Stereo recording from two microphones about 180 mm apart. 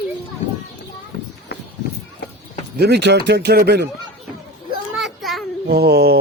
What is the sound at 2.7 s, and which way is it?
Speech, 65° right (ahead or behind).